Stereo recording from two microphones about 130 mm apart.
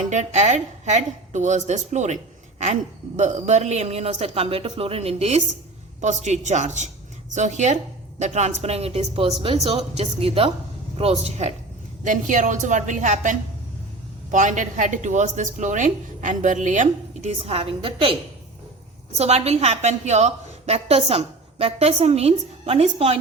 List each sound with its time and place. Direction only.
0.1 s a woman's voice: 60° right (ahead or behind)
3.2 s speech: 65° right (ahead or behind)
6.0 s a woman's voice: 65° right (ahead or behind)
12.0 s a woman's voice: 75° right (ahead or behind); by 18.1 s 45° right (ahead or behind)
19.1 s a woman's voice: 55° right (ahead or behind)